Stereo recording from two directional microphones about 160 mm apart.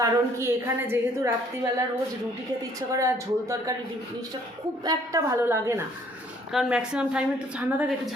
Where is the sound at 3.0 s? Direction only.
20° right (ahead or behind).